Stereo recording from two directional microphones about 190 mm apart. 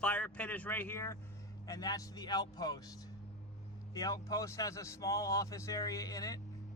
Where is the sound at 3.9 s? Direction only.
20° left (ahead or behind).